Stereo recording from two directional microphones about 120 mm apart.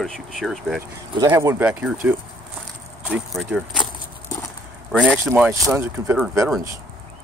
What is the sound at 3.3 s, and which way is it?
Speech, centre (ahead or behind).